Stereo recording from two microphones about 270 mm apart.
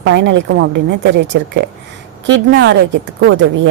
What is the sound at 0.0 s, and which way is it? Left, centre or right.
A woman's voice, right.